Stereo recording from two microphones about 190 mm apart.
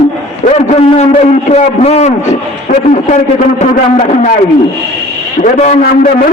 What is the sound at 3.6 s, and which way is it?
Speech, 35° left (ahead or behind).